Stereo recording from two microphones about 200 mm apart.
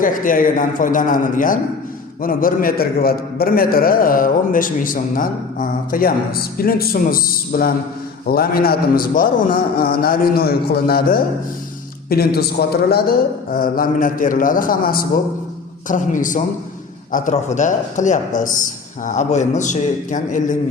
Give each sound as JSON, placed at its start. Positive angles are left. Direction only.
{"t": 0.0, "sound": "a man's voice", "side_deg": 45}